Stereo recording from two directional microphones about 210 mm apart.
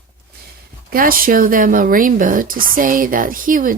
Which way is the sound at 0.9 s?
45° right (ahead or behind).